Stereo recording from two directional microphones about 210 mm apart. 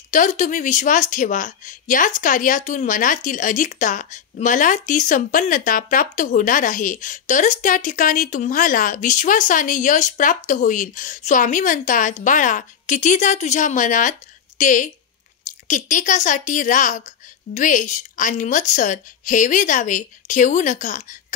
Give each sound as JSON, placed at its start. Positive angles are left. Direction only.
{"t": 0.1, "sound": "speech", "side_deg": 35}